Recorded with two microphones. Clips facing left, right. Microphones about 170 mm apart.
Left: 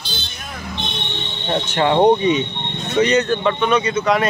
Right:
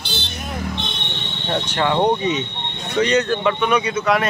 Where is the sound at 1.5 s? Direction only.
25° left (ahead or behind).